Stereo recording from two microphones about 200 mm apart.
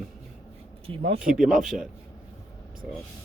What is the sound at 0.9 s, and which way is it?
Speech, 30° right (ahead or behind).